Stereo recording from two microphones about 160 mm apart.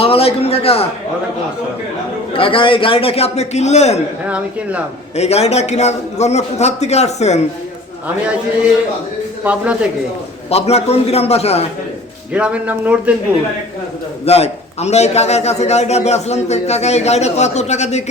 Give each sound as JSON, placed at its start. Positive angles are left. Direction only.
{"t": 0.0, "sound": "a sound", "side_deg": 35}
{"t": 2.3, "sound": "a man's voice", "side_deg": 35}
{"t": 4.3, "sound": "speech", "side_deg": -10}
{"t": 5.1, "sound": "a man's voice", "side_deg": 40}
{"t": 9.4, "sound": "speech", "side_deg": -10}
{"t": 10.5, "sound": "a man's voice", "side_deg": 40}
{"t": 12.3, "sound": "speech", "side_deg": -10}
{"t": 14.3, "sound": "a man's voice", "side_deg": 40}